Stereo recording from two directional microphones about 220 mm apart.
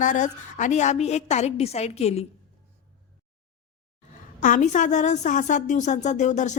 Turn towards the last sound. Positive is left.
turn(degrees=35)  # may be behind; listen again after turning